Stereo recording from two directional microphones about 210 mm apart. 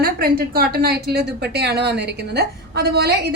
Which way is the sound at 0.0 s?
45° right (ahead or behind).